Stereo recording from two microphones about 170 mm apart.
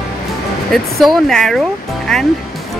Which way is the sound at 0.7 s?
Centre (ahead or behind).